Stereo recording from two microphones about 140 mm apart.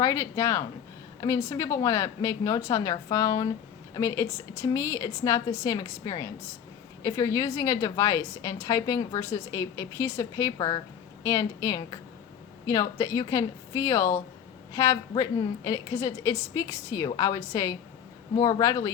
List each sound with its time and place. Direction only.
0.0 s a woman's voice: 20° left (ahead or behind)